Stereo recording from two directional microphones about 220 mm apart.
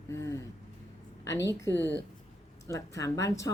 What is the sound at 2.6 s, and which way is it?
Speech, 15° left (ahead or behind).